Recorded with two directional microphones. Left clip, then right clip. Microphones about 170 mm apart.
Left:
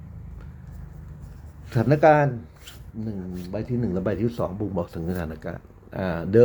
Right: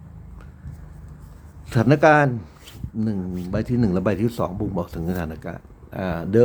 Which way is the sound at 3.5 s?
25° right (ahead or behind).